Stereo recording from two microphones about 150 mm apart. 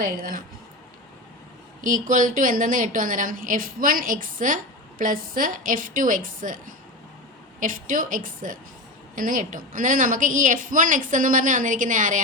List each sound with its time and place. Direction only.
0.0 s speech: 70° right (ahead or behind)
1.8 s a woman's voice: 60° right (ahead or behind)
7.6 s a woman's voice: 65° right (ahead or behind)